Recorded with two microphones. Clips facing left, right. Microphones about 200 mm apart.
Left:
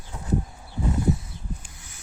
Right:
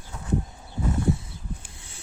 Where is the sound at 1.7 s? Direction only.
30° right (ahead or behind).